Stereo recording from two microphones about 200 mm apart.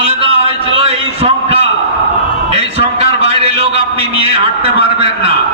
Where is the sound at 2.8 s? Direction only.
30° right (ahead or behind).